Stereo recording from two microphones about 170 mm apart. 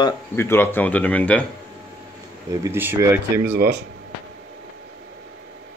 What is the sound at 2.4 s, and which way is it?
Speech, 15° right (ahead or behind).